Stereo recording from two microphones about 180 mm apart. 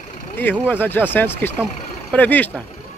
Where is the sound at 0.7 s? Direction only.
10° left (ahead or behind).